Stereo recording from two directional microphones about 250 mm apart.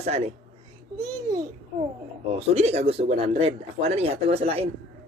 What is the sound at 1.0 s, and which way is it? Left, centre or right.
Speech, centre.